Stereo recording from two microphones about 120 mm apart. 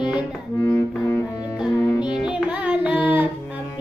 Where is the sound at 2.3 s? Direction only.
5° right (ahead or behind).